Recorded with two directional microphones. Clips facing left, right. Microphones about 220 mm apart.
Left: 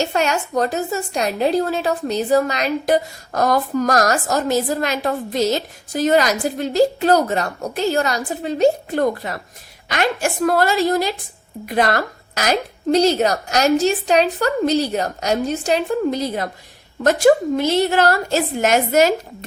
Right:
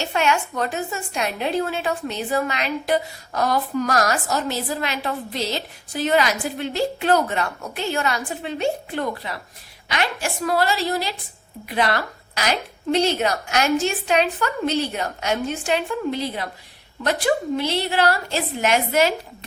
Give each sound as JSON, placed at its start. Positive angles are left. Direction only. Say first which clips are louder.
{"t": 0.0, "sound": "a woman's voice", "louder": "left 2 dB", "side_deg": 40}